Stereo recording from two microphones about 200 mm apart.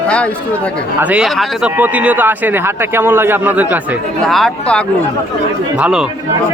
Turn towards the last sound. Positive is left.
turn(degrees=-5)  # may be behind; listen again after turning